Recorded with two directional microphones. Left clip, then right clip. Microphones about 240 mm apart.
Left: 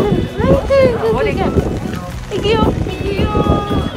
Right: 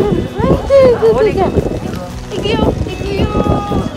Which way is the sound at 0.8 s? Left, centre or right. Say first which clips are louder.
Right 5 dB; right.